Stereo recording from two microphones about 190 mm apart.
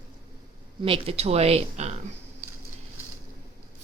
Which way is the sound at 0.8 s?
30° right (ahead or behind).